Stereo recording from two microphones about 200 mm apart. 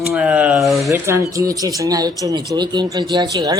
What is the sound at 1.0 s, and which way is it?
Speech, 15° right (ahead or behind).